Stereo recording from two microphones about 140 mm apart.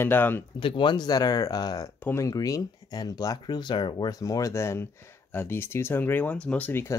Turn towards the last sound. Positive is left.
turn(degrees=15)  # may be behind; listen again after turning